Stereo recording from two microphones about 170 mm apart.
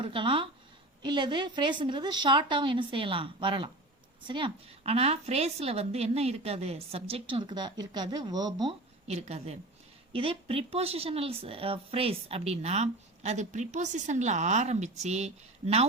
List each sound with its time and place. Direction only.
0.0 s a woman's voice: 30° right (ahead or behind)
9.0 s speech: 40° right (ahead or behind)